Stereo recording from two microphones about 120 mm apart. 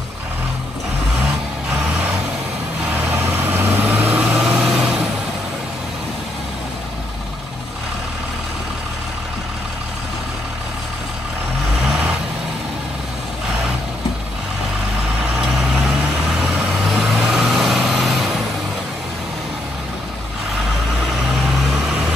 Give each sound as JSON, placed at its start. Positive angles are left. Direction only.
{"t": 2.9, "sound": "vehicle", "side_deg": -15}
{"t": 15.3, "sound": "vehicle", "side_deg": -5}
{"t": 16.9, "sound": "vehicle", "side_deg": 0}